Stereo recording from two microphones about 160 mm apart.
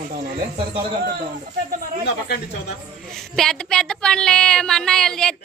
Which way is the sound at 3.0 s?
Centre (ahead or behind).